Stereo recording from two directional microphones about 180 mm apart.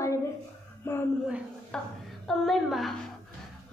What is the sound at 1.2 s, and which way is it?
A woman's voice, 5° right (ahead or behind).